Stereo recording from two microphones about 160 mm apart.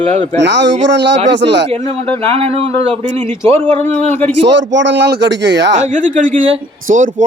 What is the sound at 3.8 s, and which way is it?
Speech, 10° left (ahead or behind).